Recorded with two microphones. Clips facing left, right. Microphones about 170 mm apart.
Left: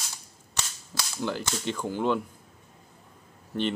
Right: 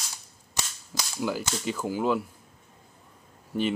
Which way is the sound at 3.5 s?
10° right (ahead or behind).